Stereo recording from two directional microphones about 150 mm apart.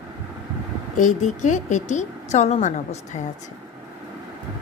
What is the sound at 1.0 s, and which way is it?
Speech, 55° left (ahead or behind).